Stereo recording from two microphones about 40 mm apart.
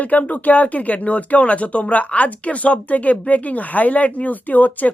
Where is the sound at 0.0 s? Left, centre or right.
Left.